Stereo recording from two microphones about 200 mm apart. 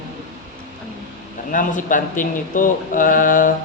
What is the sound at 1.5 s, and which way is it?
Speech, 40° left (ahead or behind).